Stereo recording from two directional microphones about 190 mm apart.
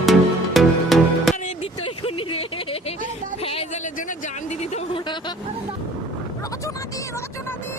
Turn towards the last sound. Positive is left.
turn(degrees=15)  # may be behind; listen again after turning